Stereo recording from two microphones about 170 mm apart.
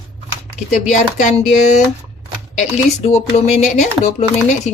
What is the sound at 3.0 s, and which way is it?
Speech, 40° left (ahead or behind).